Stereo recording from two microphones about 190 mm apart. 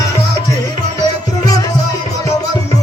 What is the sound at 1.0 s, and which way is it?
Music, 20° left (ahead or behind).